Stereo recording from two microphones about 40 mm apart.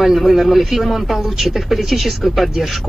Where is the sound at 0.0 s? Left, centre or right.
Centre.